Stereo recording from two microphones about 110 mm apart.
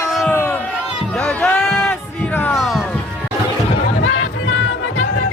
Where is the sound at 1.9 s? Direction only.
20° left (ahead or behind).